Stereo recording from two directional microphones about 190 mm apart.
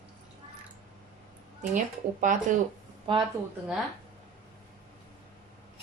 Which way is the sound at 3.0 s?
25° right (ahead or behind).